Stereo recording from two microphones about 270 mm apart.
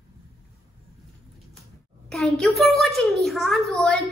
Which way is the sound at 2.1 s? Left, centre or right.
Centre.